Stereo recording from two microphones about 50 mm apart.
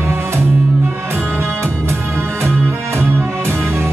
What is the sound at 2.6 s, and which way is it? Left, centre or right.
Music, right.